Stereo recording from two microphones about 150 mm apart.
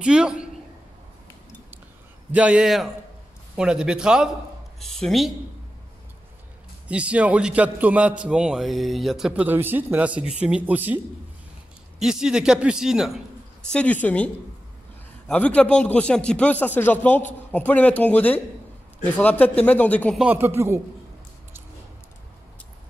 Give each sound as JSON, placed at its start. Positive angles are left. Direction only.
{"t": 0.0, "sound": "a man's voice", "side_deg": -5}
{"t": 2.3, "sound": "a man's voice", "side_deg": -5}
{"t": 6.9, "sound": "a man's voice", "side_deg": -10}
{"t": 12.0, "sound": "a man's voice", "side_deg": -5}
{"t": 13.7, "sound": "a man's voice", "side_deg": 10}
{"t": 20.2, "sound": "a man's voice", "side_deg": -10}